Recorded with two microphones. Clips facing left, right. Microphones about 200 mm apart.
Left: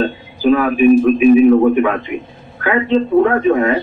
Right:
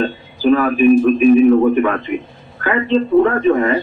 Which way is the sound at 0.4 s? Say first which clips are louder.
Left 1 dB; 15° left (ahead or behind).